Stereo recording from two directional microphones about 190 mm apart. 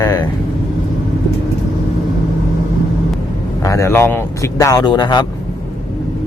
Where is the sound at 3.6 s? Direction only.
15° left (ahead or behind).